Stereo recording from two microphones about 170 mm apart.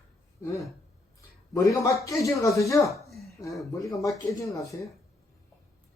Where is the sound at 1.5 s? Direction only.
20° left (ahead or behind).